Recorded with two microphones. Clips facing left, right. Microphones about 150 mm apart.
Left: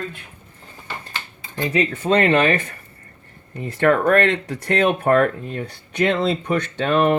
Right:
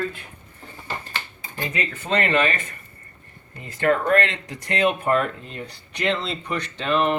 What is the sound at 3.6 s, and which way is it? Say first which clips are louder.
Speech: left 4 dB; 55° left (ahead or behind).